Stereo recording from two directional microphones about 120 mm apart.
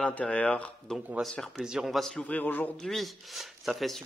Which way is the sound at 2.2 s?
15° left (ahead or behind).